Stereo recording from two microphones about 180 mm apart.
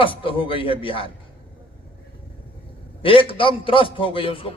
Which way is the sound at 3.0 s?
30° left (ahead or behind).